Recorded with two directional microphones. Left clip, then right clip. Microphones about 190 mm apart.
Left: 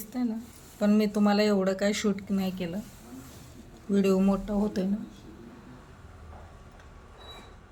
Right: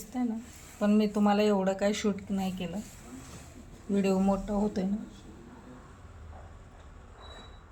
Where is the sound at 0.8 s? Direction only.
30° left (ahead or behind).